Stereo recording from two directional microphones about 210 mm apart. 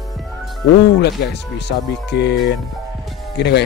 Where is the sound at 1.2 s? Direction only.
50° left (ahead or behind).